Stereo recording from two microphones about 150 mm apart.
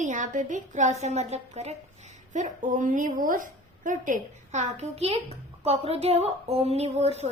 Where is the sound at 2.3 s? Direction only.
55° right (ahead or behind).